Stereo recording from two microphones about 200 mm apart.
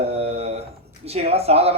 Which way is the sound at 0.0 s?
30° right (ahead or behind).